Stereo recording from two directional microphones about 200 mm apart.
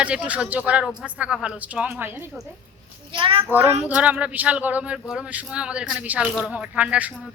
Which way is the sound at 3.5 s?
10° right (ahead or behind).